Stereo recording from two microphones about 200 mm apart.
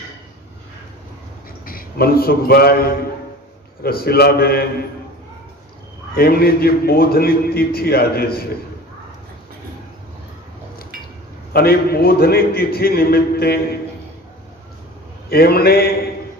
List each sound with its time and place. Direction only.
1.6 s a man's voice: 45° left (ahead or behind)
6.1 s a man's voice: 50° left (ahead or behind)
11.5 s a man's voice: 50° left (ahead or behind)
15.3 s a man's voice: 50° left (ahead or behind)